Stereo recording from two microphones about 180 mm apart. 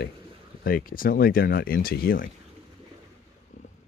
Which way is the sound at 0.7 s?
55° left (ahead or behind).